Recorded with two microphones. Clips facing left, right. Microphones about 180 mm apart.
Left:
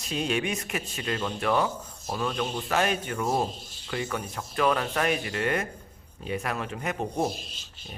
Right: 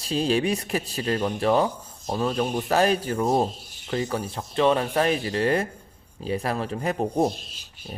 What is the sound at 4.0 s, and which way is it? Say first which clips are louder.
A man's voice: right 4 dB; 35° right (ahead or behind).